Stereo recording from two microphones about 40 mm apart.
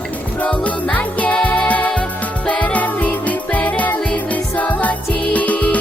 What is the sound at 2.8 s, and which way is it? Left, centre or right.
Music, left.